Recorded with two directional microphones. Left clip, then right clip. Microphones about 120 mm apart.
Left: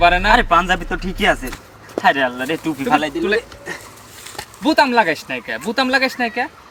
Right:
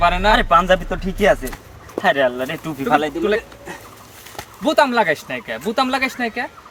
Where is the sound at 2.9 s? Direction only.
5° right (ahead or behind).